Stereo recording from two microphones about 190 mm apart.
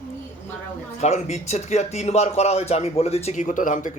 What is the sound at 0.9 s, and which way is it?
Speech, 35° left (ahead or behind).